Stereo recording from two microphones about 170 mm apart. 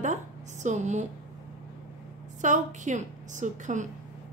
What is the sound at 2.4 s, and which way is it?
Speech, 45° right (ahead or behind).